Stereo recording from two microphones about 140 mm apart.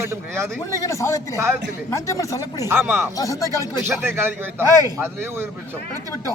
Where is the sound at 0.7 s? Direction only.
20° left (ahead or behind).